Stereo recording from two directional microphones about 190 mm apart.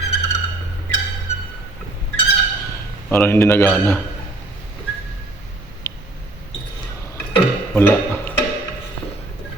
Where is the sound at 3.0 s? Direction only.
10° left (ahead or behind).